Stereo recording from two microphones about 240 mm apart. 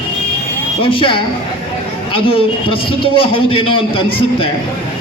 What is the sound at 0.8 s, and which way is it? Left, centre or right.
A man's voice, left.